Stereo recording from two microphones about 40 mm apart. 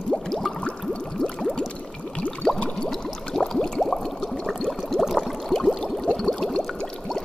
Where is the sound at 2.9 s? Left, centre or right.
Centre.